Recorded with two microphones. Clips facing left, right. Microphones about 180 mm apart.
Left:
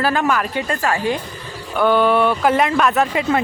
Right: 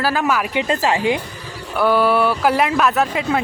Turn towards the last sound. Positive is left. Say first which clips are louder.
# left 1 dB
turn(degrees=0)  # may be behind; listen again after turning